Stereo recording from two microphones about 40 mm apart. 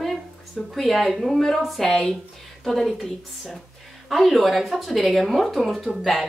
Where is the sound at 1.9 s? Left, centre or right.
Centre.